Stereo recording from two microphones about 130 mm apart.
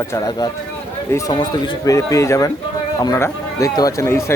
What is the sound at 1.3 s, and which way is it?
A man's voice, 35° left (ahead or behind).